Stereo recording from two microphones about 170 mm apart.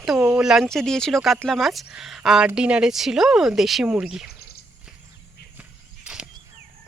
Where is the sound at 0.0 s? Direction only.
Centre (ahead or behind).